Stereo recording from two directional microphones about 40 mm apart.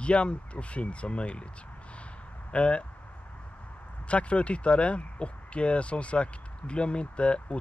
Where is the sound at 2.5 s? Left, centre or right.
Left.